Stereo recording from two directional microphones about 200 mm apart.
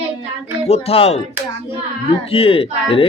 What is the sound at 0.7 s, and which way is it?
Speech, 30° left (ahead or behind).